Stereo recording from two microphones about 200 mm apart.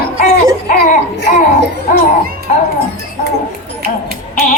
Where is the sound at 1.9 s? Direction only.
40° left (ahead or behind).